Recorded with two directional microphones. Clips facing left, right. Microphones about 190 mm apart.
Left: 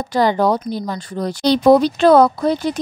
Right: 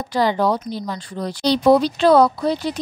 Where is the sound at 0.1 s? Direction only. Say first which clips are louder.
Left 3 dB; 50° left (ahead or behind).